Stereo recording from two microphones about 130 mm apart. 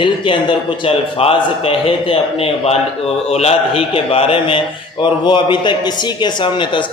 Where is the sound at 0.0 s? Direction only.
40° left (ahead or behind).